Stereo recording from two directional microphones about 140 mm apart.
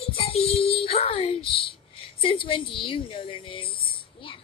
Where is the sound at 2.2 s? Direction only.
40° left (ahead or behind).